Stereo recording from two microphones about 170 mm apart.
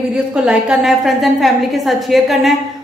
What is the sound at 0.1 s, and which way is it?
A woman's voice, 5° right (ahead or behind).